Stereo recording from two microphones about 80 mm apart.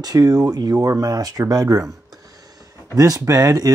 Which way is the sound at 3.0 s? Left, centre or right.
Right.